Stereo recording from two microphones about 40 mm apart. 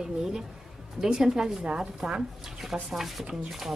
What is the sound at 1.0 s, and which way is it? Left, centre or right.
A woman's voice, centre.